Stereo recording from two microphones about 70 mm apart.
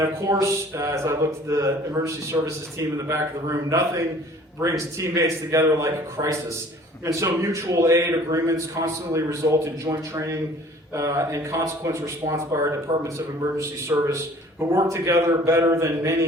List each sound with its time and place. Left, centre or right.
0.0 s speech: right
6.2 s a man's voice: right
7.0 s speech: right